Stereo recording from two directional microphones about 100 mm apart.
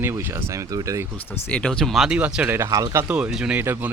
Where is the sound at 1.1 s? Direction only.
15° left (ahead or behind).